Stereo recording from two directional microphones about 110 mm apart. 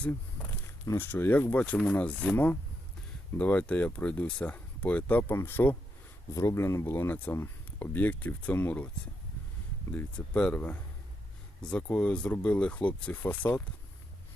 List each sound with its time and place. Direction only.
0.9 s speech: 20° left (ahead or behind)
9.9 s speech: 10° left (ahead or behind)